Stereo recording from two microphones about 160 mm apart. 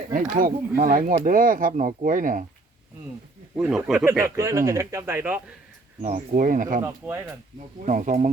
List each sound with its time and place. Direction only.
0.1 s speech: 60° right (ahead or behind)
3.5 s speech: 5° right (ahead or behind)
4.2 s speech: 20° right (ahead or behind)
6.0 s speech: 55° right (ahead or behind)
6.8 s speech: 15° right (ahead or behind)
7.9 s speech: 50° right (ahead or behind)